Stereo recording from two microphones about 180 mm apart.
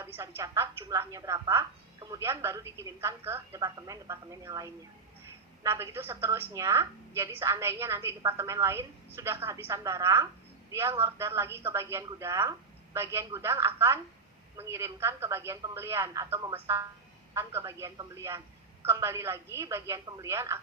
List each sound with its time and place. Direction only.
0.0 s a woman's voice: 15° right (ahead or behind)